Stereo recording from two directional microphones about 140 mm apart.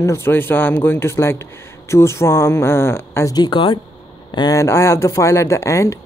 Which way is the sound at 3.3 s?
30° left (ahead or behind).